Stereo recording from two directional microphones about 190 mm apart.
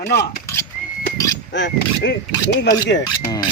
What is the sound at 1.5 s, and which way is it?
Speech, 65° left (ahead or behind).